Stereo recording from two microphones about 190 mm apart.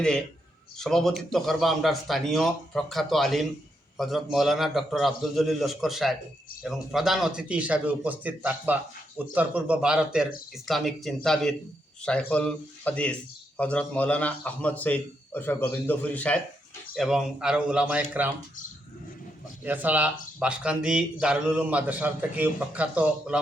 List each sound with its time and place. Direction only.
0.8 s a man's voice: centre (ahead or behind)
19.6 s speech: 10° right (ahead or behind)